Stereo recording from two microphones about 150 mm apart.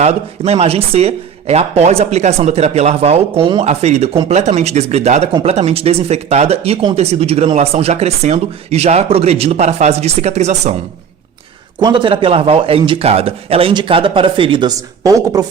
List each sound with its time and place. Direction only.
0.0 s speech: 45° right (ahead or behind)
11.8 s speech: 30° right (ahead or behind)
14.8 s speech: 25° right (ahead or behind)